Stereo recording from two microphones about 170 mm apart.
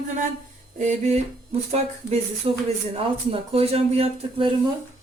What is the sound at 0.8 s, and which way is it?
Speech, 40° right (ahead or behind).